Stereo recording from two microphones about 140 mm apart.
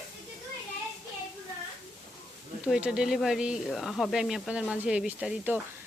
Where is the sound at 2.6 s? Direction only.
5° right (ahead or behind).